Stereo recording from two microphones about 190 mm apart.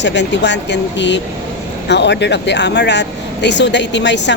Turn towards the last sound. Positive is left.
turn(degrees=65)  # may be behind; listen again after turning